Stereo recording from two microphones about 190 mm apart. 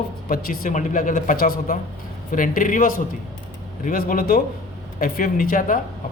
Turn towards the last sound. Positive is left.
turn(degrees=45)  # may be behind; listen again after turning